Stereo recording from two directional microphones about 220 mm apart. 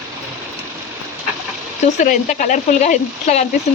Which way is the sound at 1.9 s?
35° left (ahead or behind).